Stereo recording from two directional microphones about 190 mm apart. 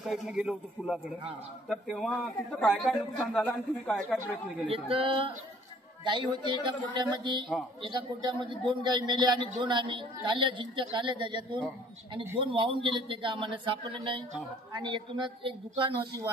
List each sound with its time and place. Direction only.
0.0 s a man's voice: centre (ahead or behind)
4.6 s a woman's voice: 30° right (ahead or behind)